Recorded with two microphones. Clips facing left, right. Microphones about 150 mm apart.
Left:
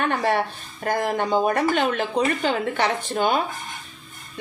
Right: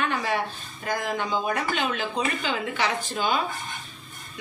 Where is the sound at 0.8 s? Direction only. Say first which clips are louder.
Left 5 dB; 60° left (ahead or behind).